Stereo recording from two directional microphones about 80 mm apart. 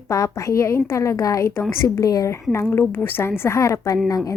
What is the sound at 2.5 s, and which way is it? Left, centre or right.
A woman's voice, left.